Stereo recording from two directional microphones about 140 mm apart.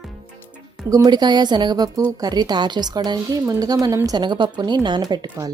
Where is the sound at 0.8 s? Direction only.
25° right (ahead or behind).